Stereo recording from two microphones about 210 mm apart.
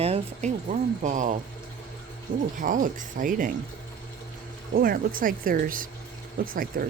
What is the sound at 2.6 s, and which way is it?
Speech, 40° right (ahead or behind).